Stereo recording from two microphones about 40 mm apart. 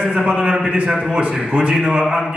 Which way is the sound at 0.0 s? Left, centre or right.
Centre.